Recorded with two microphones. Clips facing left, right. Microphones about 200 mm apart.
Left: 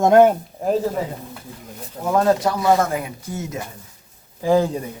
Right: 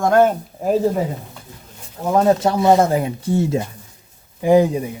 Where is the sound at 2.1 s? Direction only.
20° right (ahead or behind).